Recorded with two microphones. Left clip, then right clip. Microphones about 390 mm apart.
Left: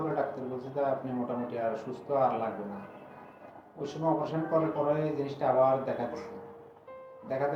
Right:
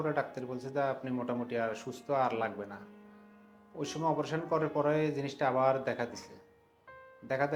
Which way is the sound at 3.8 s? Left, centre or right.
Right.